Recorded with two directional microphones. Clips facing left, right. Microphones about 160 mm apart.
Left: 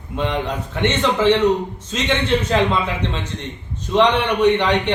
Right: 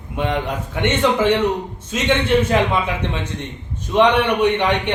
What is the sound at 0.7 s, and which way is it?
A man's voice, 10° right (ahead or behind).